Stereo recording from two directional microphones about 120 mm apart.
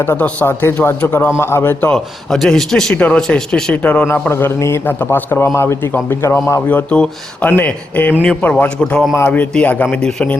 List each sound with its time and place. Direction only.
0.0 s a man's voice: 15° left (ahead or behind)
1.9 s a man's voice: 5° left (ahead or behind); by 6.6 s 25° left (ahead or behind)
6.7 s speech: 10° left (ahead or behind)